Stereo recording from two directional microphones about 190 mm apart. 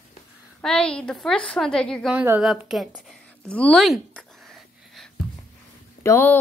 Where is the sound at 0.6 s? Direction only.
5° left (ahead or behind).